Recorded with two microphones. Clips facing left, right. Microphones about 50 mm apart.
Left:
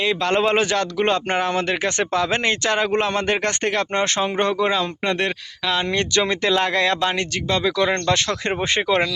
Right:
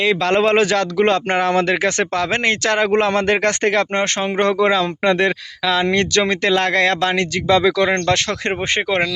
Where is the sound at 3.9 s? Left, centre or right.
Right.